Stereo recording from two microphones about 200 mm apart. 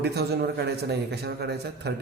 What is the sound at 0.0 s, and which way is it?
A man's voice, 55° right (ahead or behind).